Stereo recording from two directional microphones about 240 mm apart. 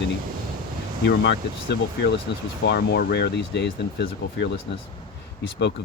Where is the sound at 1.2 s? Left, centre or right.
Left.